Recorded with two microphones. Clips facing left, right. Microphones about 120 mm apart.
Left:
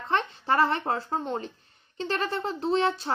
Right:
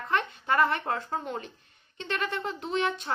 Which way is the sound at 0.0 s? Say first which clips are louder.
Left 2 dB; 30° left (ahead or behind).